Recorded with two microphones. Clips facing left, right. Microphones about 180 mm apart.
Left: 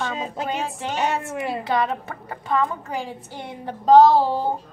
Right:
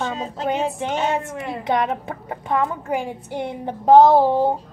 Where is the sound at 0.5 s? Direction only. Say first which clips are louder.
Right 5 dB; 20° right (ahead or behind).